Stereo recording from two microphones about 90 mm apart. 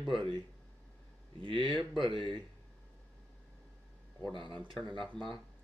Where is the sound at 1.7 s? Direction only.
Centre (ahead or behind).